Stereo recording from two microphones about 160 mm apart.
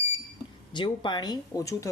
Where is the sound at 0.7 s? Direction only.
30° left (ahead or behind).